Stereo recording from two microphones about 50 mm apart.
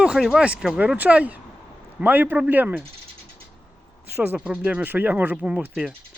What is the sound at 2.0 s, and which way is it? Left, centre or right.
Speech, right.